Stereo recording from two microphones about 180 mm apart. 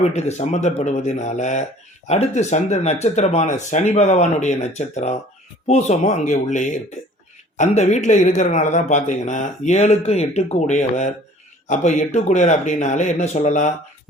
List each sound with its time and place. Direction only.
0.0 s speech: 40° left (ahead or behind)
7.8 s speech: 40° left (ahead or behind)